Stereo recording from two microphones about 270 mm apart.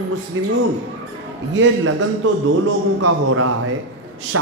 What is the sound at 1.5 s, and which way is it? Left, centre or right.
Speech, right.